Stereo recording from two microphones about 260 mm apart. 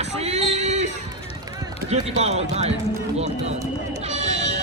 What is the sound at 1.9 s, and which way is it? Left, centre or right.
Speech, right.